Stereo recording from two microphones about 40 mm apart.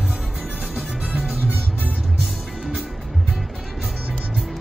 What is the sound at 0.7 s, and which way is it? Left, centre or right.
Music, right.